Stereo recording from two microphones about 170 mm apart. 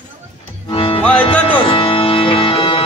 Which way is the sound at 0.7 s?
30° left (ahead or behind).